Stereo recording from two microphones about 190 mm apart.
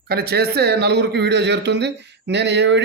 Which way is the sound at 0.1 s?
55° right (ahead or behind).